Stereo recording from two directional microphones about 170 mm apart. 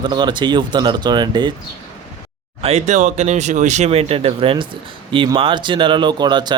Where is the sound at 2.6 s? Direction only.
40° right (ahead or behind).